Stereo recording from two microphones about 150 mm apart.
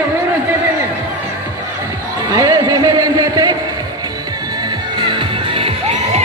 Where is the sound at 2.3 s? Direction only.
25° right (ahead or behind).